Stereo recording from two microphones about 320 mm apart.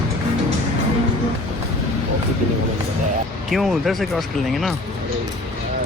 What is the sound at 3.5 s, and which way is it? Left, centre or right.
Speech, centre.